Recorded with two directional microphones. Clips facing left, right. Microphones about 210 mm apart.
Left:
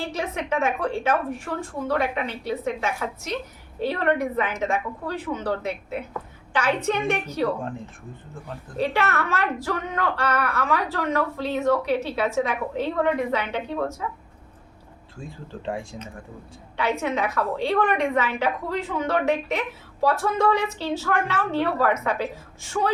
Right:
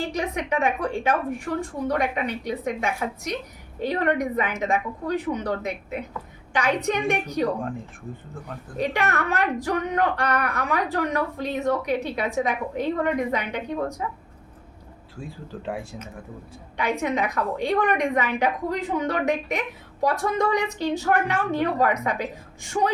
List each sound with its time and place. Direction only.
0.0 s a woman's voice: 15° right (ahead or behind)
8.8 s a woman's voice: 15° right (ahead or behind)
15.2 s speech: 5° right (ahead or behind)
16.7 s a woman's voice: 15° right (ahead or behind)